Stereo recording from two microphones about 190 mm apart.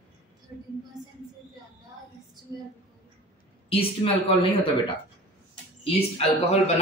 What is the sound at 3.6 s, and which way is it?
A woman's voice, 30° left (ahead or behind).